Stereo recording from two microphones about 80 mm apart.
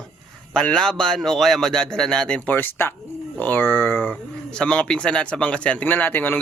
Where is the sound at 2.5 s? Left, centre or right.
Left.